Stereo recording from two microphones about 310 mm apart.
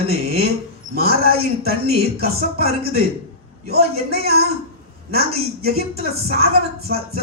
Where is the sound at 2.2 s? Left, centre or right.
Right.